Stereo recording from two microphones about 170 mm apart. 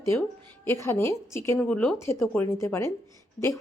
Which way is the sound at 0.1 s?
15° left (ahead or behind).